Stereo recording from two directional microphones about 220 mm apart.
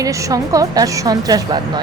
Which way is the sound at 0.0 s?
15° right (ahead or behind).